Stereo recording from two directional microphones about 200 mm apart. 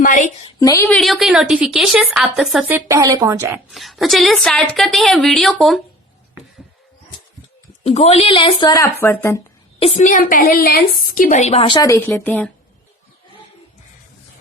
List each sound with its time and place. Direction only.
0.0 s a woman's voice: 40° left (ahead or behind)
0.6 s speech: 15° left (ahead or behind)
0.9 s speech: centre (ahead or behind)
3.7 s speech: centre (ahead or behind)
7.9 s speech: 30° left (ahead or behind); by 9.4 s 15° left (ahead or behind)
9.8 s a woman's voice: 35° left (ahead or behind); by 12.5 s 10° left (ahead or behind)